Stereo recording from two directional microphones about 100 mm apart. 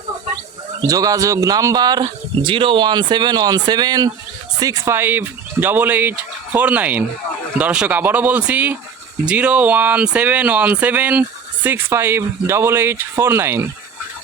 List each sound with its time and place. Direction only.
0.8 s speech: 35° right (ahead or behind)
2.4 s speech: 60° right (ahead or behind); by 4.9 s 35° right (ahead or behind)
4.9 s speech: 20° right (ahead or behind)